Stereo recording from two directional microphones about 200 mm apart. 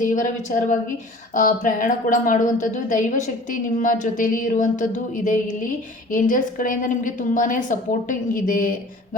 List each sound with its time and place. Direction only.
0.0 s a woman's voice: 40° left (ahead or behind)